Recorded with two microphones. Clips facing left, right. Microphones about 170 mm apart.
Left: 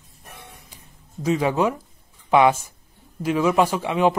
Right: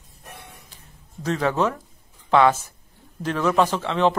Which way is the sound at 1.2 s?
10° left (ahead or behind).